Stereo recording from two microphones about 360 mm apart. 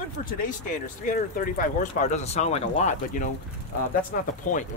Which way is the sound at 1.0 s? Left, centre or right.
Left.